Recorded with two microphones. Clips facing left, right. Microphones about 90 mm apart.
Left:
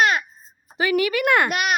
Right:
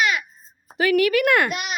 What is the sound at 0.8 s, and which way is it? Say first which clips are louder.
Speech: right 2 dB; 5° left (ahead or behind).